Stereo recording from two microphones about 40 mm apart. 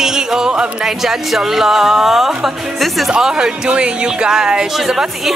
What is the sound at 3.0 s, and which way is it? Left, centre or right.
Speech, centre.